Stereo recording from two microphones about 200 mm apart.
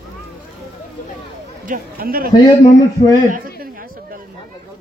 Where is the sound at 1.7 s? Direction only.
45° right (ahead or behind).